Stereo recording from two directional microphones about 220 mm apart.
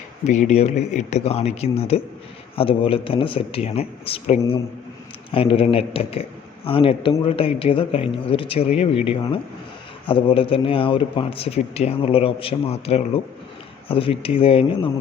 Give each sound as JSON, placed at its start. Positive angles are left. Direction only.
{"t": 0.3, "sound": "a man's voice", "side_deg": 30}